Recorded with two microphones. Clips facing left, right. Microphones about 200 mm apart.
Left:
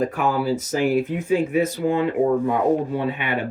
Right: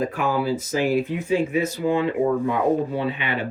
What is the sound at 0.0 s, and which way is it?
Speech, 45° left (ahead or behind).